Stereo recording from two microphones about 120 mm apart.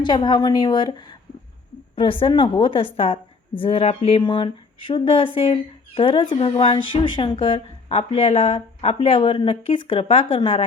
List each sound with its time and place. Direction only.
0.0 s a woman's voice: 40° left (ahead or behind)
4.2 s a woman's voice: 40° left (ahead or behind)
6.3 s a woman's voice: 60° left (ahead or behind)